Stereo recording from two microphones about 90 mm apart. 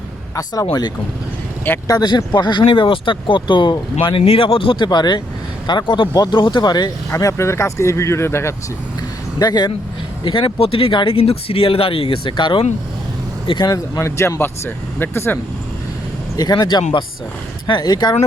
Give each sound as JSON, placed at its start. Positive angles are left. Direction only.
{"t": 0.3, "sound": "speech", "side_deg": 40}
{"t": 4.9, "sound": "speech", "side_deg": 50}
{"t": 7.1, "sound": "speech", "side_deg": 35}
{"t": 9.4, "sound": "speech", "side_deg": 45}
{"t": 10.2, "sound": "speech", "side_deg": 70}
{"t": 13.6, "sound": "speech", "side_deg": 40}
{"t": 16.4, "sound": "speech", "side_deg": 50}